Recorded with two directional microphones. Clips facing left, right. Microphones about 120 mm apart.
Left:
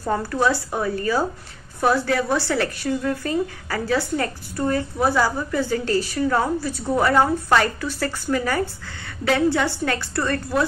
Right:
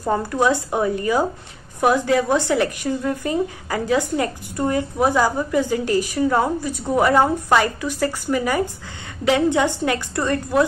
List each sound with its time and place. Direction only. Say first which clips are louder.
0.0 s a woman's voice: right 2 dB; 15° right (ahead or behind)